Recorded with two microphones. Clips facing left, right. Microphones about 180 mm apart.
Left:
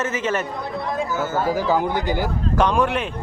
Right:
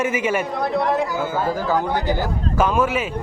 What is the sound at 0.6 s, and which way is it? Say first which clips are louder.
Speech: right 6 dB; 70° right (ahead or behind).